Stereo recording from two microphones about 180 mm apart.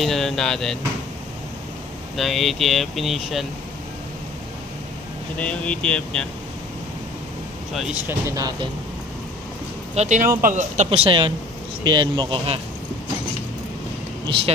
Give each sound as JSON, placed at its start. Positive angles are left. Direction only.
{"t": 0.0, "sound": "speech", "side_deg": 0}
{"t": 2.1, "sound": "speech", "side_deg": 0}
{"t": 5.4, "sound": "speech", "side_deg": 5}
{"t": 7.7, "sound": "speech", "side_deg": -5}
{"t": 8.1, "sound": "speech", "side_deg": -20}
{"t": 9.9, "sound": "speech", "side_deg": -40}